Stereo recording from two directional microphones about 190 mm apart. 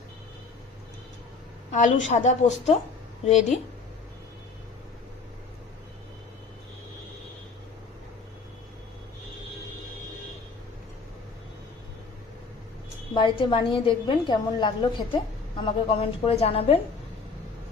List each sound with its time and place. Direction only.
1.7 s a woman's voice: 40° left (ahead or behind)
13.1 s a woman's voice: 25° left (ahead or behind)